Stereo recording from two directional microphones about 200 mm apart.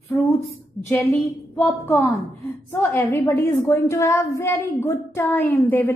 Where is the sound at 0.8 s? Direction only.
10° left (ahead or behind).